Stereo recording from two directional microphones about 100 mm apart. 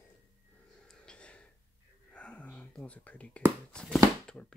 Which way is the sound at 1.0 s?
10° left (ahead or behind).